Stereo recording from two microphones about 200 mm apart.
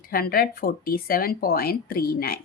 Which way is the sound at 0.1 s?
45° left (ahead or behind).